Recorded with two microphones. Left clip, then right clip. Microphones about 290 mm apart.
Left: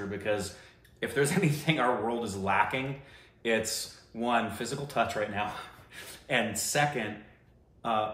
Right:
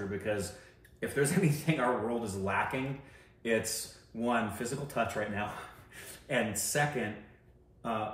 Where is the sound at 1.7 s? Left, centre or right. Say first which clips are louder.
Left 4 dB; centre.